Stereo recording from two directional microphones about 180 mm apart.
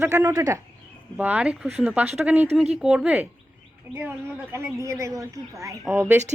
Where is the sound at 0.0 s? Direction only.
15° right (ahead or behind).